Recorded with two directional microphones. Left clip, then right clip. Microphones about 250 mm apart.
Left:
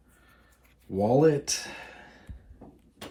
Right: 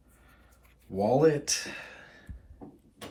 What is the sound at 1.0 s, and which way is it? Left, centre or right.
Speech, centre.